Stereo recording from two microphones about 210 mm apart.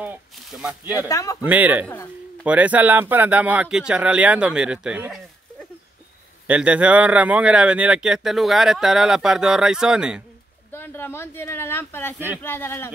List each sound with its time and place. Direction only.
0.0 s speech: 5° right (ahead or behind)
1.0 s speech: 15° left (ahead or behind)
1.4 s a man's voice: 10° right (ahead or behind)
6.4 s speech: 5° right (ahead or behind)
10.7 s speech: 10° left (ahead or behind)